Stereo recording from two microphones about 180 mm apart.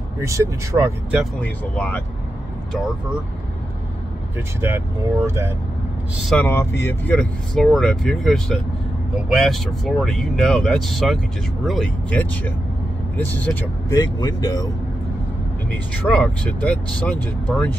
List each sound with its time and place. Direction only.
0.2 s speech: 15° right (ahead or behind)
1.4 s speech: 10° left (ahead or behind)
4.6 s speech: 15° right (ahead or behind)
6.2 s speech: 10° left (ahead or behind)
13.9 s speech: 20° left (ahead or behind)
15.7 s speech: 5° left (ahead or behind)